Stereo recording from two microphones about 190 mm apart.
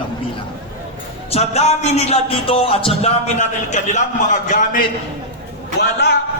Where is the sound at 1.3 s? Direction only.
35° left (ahead or behind).